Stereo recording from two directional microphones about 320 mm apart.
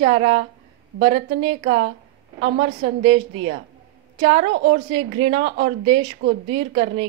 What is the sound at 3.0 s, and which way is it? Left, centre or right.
Speech, centre.